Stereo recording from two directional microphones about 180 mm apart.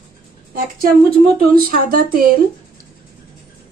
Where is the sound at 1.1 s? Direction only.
55° right (ahead or behind).